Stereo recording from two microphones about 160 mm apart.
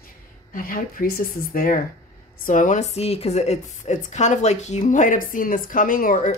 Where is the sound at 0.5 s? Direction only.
60° left (ahead or behind).